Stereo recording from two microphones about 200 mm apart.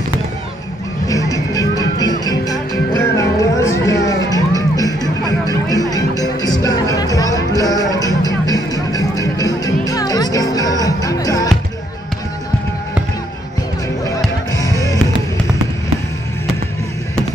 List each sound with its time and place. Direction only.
1.0 s music: 15° left (ahead or behind)
14.0 s music: 15° left (ahead or behind)